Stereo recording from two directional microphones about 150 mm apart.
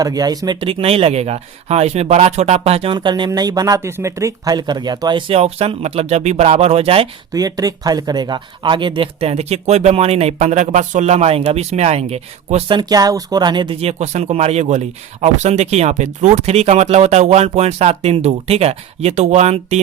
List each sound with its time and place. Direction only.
0.0 s speech: 25° right (ahead or behind)
5.3 s speech: 40° right (ahead or behind)
7.3 s speech: 25° right (ahead or behind); by 19.8 s 45° right (ahead or behind)